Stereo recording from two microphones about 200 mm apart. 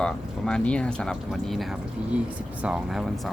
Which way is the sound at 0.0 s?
5° left (ahead or behind).